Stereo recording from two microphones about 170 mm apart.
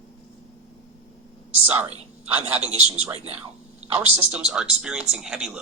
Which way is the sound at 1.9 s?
35° right (ahead or behind).